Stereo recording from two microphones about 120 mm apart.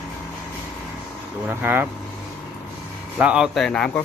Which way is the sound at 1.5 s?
15° right (ahead or behind).